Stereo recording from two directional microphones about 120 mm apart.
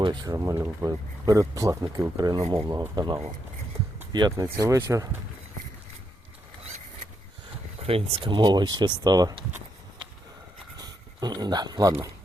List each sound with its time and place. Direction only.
0.0 s speech: 35° right (ahead or behind)
7.8 s speech: 55° right (ahead or behind); by 9.3 s 35° right (ahead or behind)
11.2 s speech: 35° right (ahead or behind)